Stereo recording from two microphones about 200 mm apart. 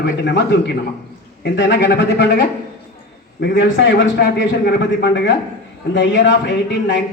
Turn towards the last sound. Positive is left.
turn(degrees=60)  # may be behind; listen again after turning